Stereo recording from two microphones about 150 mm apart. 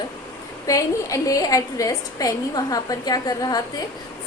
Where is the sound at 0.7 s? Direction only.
20° left (ahead or behind).